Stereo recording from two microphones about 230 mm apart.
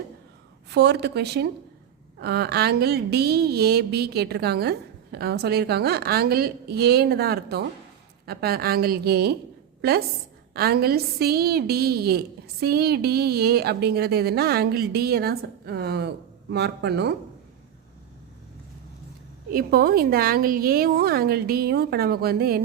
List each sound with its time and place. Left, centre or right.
0.7 s a woman's voice: right
10.5 s a woman's voice: right
19.5 s a woman's voice: right